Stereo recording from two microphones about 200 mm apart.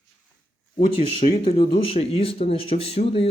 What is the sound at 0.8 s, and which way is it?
Speech, 30° left (ahead or behind).